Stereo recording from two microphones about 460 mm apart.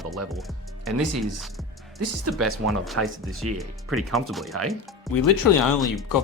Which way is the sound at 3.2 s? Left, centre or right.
Centre.